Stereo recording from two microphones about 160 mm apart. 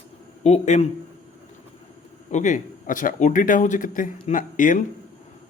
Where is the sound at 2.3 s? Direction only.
50° left (ahead or behind).